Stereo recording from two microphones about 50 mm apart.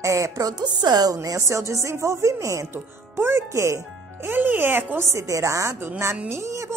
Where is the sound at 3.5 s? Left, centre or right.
Right.